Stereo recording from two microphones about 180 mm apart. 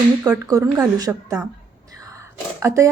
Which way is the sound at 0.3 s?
20° right (ahead or behind).